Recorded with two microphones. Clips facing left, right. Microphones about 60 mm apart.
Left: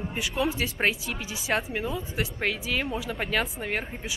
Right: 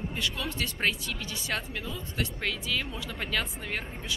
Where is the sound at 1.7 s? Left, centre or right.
Left.